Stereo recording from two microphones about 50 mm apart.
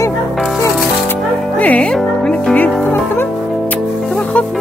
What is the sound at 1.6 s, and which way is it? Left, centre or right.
Music, left.